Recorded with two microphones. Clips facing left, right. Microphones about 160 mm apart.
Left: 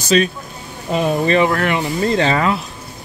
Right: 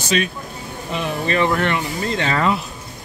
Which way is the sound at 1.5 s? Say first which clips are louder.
Left 1 dB; 5° left (ahead or behind).